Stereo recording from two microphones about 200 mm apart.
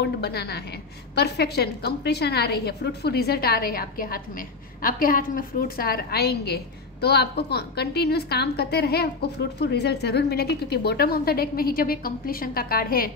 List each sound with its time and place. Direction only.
0.0 s a woman's voice: 55° left (ahead or behind)